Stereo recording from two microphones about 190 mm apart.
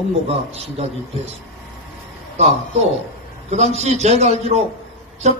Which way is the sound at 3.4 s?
35° right (ahead or behind).